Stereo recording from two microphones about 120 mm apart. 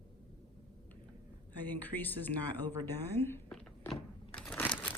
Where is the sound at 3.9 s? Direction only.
5° left (ahead or behind).